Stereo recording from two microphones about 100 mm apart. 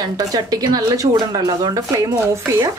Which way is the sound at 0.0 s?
40° right (ahead or behind).